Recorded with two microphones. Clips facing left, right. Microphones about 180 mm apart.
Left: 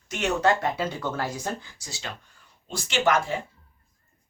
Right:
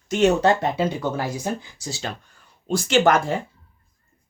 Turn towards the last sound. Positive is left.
turn(degrees=-45)  # may be behind; listen again after turning